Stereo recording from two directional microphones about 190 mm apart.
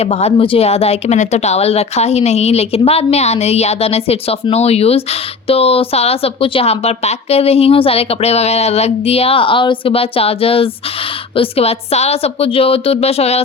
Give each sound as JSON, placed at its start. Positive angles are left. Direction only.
{"t": 0.0, "sound": "a woman's voice", "side_deg": 35}